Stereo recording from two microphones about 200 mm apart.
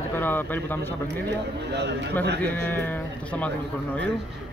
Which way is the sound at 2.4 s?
10° left (ahead or behind).